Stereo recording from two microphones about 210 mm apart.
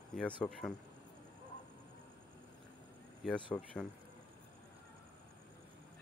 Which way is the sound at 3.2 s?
5° left (ahead or behind).